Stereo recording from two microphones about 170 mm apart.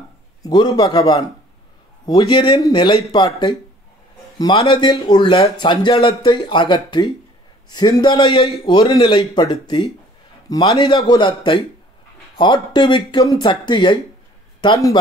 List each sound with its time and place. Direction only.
0.4 s a man's voice: 25° left (ahead or behind)